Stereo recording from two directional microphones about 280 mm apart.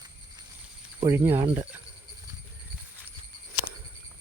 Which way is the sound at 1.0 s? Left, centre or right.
Centre.